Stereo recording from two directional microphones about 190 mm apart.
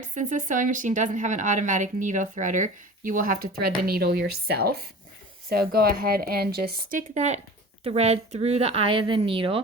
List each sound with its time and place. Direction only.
0.1 s speech: 40° right (ahead or behind)
7.1 s speech: 35° right (ahead or behind)